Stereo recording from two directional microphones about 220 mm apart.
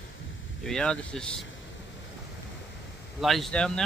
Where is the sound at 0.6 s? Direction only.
5° left (ahead or behind).